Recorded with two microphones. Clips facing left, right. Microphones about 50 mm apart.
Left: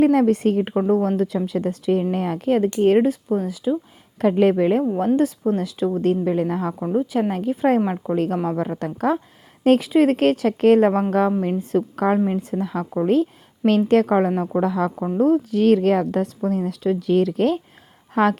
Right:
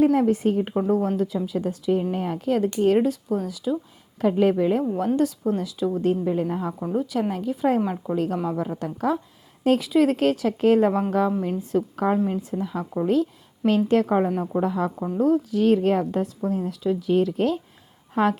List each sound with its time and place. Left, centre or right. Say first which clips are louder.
0.0 s speech: left 3 dB; left
2.5 s speech: left 3 dB; left
4.2 s speech: left 3 dB; left
4.8 s speech: left 3 dB; left
5.5 s speech: left 3 dB; left
6.8 s speech: left 4 dB; left
7.3 s speech: left 3 dB; left
13.7 s speech: left 3 dB; left
15.2 s speech: left 3 dB; left
15.6 s a woman's voice: left 3 dB; left